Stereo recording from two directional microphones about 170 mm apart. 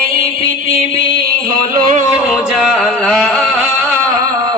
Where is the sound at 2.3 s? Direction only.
Centre (ahead or behind).